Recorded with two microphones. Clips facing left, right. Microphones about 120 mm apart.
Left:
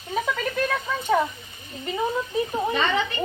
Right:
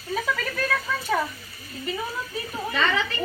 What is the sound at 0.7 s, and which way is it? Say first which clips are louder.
A child's voice: left 2 dB; 20° left (ahead or behind).